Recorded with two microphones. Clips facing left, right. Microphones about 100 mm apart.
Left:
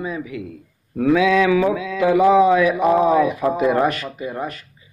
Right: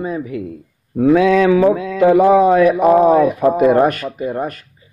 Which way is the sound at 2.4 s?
45° right (ahead or behind).